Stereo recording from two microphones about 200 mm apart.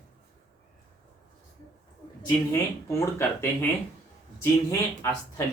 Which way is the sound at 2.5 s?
10° left (ahead or behind).